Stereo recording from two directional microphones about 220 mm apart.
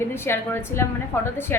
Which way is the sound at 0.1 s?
10° left (ahead or behind).